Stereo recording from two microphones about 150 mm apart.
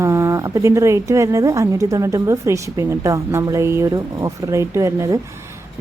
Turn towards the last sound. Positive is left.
turn(degrees=-20)  # may be behind; listen again after turning